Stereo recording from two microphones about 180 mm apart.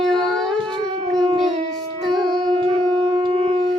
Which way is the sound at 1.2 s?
25° right (ahead or behind).